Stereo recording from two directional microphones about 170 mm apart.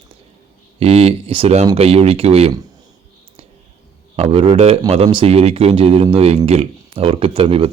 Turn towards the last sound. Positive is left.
turn(degrees=-35)  # may be behind; listen again after turning